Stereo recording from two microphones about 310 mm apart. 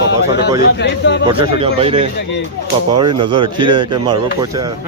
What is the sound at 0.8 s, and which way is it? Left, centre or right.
Speech, left.